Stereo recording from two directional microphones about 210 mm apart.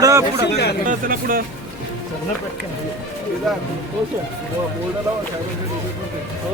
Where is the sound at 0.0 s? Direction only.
15° right (ahead or behind).